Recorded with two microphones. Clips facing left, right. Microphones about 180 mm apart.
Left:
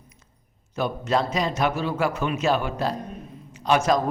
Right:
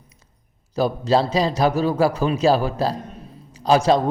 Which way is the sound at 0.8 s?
35° right (ahead or behind).